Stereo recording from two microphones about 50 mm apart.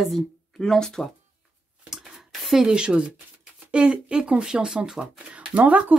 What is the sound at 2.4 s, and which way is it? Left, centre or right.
Speech, centre.